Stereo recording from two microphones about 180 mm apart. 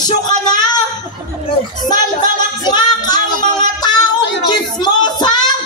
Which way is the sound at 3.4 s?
25° left (ahead or behind).